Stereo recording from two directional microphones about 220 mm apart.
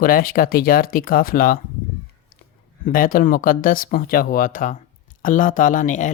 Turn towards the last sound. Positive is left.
turn(degrees=35)  # may be behind; listen again after turning